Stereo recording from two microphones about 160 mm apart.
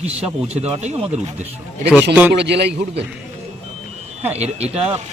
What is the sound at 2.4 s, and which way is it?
Speech, 90° right.